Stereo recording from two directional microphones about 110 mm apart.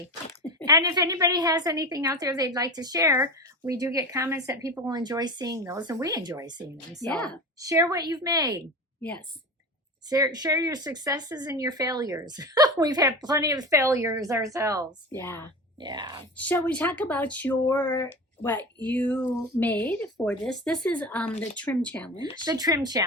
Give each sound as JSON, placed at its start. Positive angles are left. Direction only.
{"t": 0.6, "sound": "speech", "side_deg": -35}
{"t": 4.9, "sound": "speech", "side_deg": -40}
{"t": 9.0, "sound": "a woman's voice", "side_deg": 15}
{"t": 10.1, "sound": "speech", "side_deg": -35}
{"t": 15.1, "sound": "speech", "side_deg": 20}
{"t": 15.8, "sound": "speech", "side_deg": -40}
{"t": 16.4, "sound": "speech", "side_deg": 15}
{"t": 22.4, "sound": "speech", "side_deg": -35}